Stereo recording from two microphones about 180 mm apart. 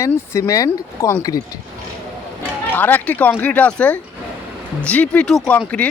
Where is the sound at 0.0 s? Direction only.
15° left (ahead or behind).